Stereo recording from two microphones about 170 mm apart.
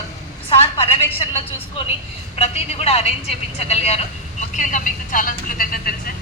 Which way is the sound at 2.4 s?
35° left (ahead or behind).